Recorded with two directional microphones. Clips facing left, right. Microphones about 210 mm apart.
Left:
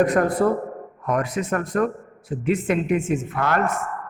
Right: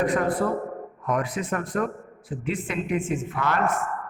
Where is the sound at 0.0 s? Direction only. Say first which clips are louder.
Left 5 dB; 45° left (ahead or behind).